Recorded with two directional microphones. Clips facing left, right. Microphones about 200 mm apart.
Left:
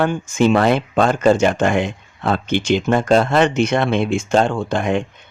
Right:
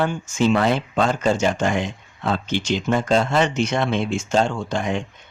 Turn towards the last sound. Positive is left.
turn(degrees=55)  # may be behind; listen again after turning